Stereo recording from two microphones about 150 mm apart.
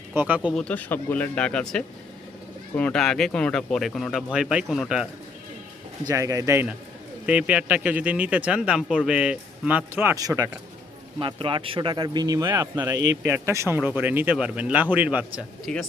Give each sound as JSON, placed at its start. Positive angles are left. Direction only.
{"t": 0.1, "sound": "speech", "side_deg": -10}
{"t": 0.5, "sound": "speech", "side_deg": 10}
{"t": 6.1, "sound": "speech", "side_deg": -20}
{"t": 11.2, "sound": "speech", "side_deg": -35}
{"t": 15.6, "sound": "speech", "side_deg": 0}